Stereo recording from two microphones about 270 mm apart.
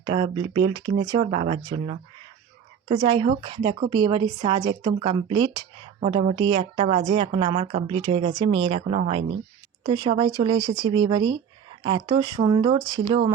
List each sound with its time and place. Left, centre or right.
0.0 s a woman's voice: centre